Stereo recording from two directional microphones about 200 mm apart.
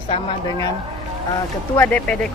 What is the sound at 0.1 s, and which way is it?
Speech, 20° left (ahead or behind).